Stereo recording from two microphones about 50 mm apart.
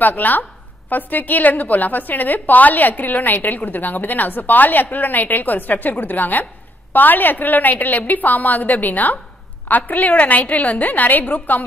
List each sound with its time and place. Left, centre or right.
0.0 s a woman's voice: left